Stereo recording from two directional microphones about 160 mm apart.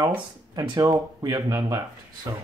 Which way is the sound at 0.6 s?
25° right (ahead or behind).